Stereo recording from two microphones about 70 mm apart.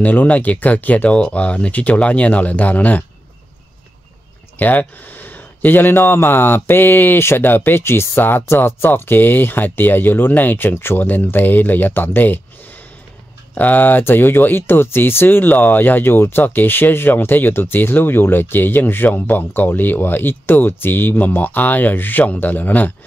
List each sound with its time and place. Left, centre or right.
0.0 s speech: left
4.6 s speech: left